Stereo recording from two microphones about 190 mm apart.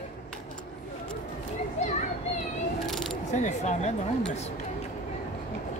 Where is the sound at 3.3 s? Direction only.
40° left (ahead or behind).